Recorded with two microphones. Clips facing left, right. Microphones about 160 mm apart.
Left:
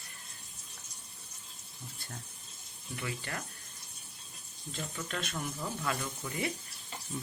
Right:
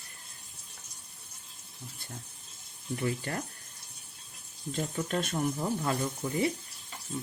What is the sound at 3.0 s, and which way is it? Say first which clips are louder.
Speech: right 6 dB; 40° right (ahead or behind).